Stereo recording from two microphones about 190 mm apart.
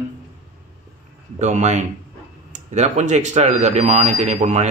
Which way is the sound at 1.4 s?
40° right (ahead or behind).